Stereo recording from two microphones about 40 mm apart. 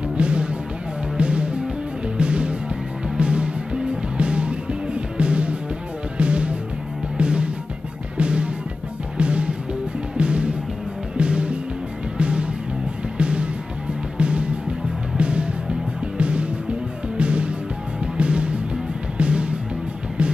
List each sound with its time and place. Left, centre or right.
0.2 s music: right